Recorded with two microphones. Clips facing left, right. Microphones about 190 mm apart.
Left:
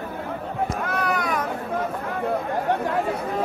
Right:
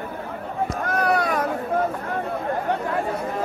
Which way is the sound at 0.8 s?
35° right (ahead or behind).